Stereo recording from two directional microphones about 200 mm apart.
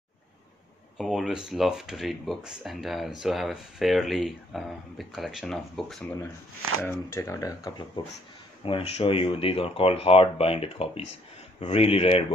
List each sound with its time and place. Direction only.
0.9 s speech: centre (ahead or behind)
6.8 s speech: 15° left (ahead or behind); by 12.2 s 30° left (ahead or behind)